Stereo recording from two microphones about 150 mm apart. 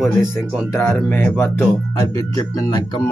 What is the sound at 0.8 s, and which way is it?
Speech, 10° left (ahead or behind).